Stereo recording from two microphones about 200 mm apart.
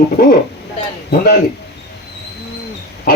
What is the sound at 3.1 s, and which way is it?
Pig, 45° left (ahead or behind).